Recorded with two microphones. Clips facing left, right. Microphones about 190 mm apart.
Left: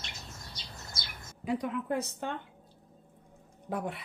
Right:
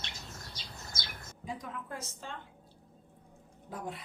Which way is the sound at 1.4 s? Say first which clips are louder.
Left 10 dB; 70° left (ahead or behind).